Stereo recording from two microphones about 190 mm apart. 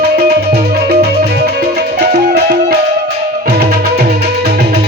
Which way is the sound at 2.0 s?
60° right (ahead or behind).